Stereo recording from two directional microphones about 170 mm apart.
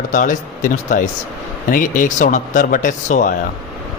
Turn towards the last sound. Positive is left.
turn(degrees=50)  # may be behind; listen again after turning